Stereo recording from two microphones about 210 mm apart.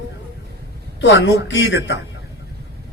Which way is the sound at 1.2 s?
60° left (ahead or behind).